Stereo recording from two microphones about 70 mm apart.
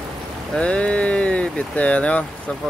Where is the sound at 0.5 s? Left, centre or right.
Centre.